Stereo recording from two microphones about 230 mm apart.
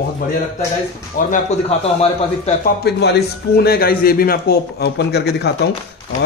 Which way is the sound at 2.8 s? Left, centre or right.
Left.